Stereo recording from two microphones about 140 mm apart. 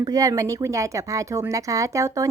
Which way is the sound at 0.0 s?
25° right (ahead or behind).